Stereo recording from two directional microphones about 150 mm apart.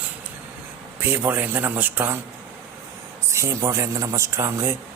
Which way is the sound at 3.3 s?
20° right (ahead or behind).